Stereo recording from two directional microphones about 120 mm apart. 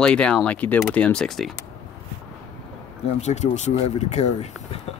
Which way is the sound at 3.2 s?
70° left (ahead or behind).